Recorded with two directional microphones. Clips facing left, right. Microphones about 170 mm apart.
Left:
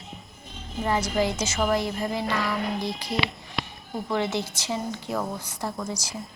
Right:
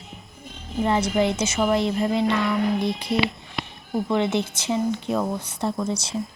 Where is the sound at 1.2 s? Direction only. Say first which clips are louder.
Right 3 dB; 25° right (ahead or behind).